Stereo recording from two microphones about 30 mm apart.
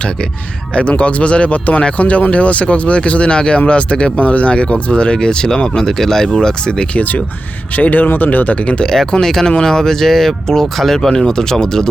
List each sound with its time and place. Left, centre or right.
0.7 s speech: left
6.9 s speech: left
7.8 s speech: left
8.8 s speech: centre
11.1 s speech: left